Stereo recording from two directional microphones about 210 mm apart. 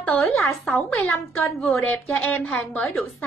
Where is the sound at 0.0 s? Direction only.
5° left (ahead or behind).